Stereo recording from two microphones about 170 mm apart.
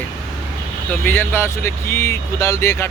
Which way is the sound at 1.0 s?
10° left (ahead or behind).